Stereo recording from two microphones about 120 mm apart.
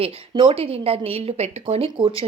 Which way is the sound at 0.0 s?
50° right (ahead or behind).